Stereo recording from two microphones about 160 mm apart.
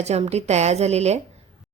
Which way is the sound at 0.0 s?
40° right (ahead or behind).